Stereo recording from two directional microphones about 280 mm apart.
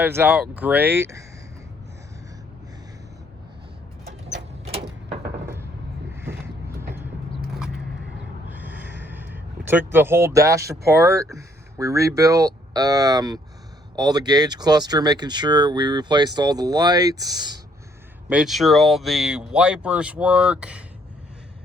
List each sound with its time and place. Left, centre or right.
0.0 s speech: centre
4.0 s vehicle: right
4.6 s a sound: right
8.4 s speech: centre
18.3 s speech: centre